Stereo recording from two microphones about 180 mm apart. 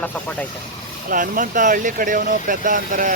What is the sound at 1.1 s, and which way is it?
Speech, 50° right (ahead or behind).